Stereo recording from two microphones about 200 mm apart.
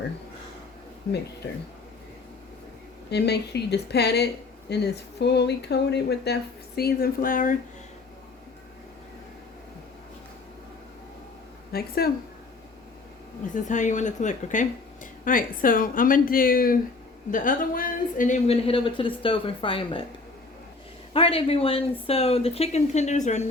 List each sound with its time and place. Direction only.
3.1 s speech: 55° left (ahead or behind)
11.7 s speech: 50° left (ahead or behind)
13.5 s a woman's voice: 40° left (ahead or behind)
21.1 s speech: 30° left (ahead or behind)